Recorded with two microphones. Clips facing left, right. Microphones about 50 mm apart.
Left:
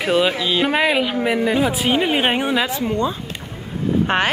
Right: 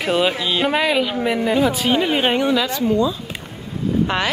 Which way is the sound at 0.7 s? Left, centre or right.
Centre.